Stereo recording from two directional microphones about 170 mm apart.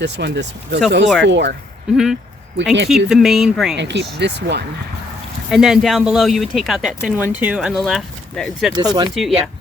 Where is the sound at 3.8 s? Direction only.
90° right.